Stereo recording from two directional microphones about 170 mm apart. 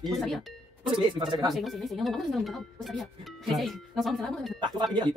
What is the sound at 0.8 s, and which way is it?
Speech, 30° right (ahead or behind).